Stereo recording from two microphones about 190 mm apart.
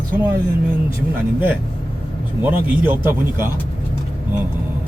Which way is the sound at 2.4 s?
10° right (ahead or behind).